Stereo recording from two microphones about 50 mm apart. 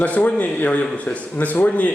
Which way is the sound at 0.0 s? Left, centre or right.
Left.